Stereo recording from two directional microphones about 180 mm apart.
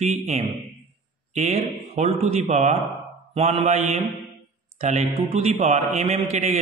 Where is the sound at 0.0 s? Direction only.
40° right (ahead or behind).